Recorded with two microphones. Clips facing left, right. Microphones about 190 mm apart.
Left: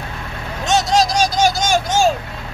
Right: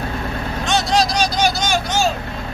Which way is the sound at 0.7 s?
45° left (ahead or behind).